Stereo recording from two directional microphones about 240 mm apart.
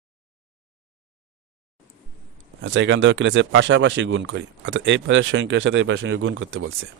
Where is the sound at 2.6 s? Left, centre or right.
Right.